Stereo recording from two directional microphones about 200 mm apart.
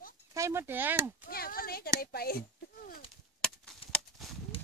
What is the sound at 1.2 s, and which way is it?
Speech, 50° left (ahead or behind).